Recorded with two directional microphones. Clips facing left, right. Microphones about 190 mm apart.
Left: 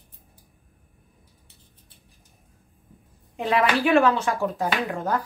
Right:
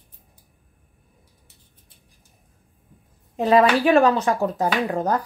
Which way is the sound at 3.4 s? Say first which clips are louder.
Right 6 dB; 40° right (ahead or behind).